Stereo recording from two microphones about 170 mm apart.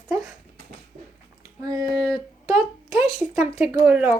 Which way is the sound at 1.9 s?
20° right (ahead or behind).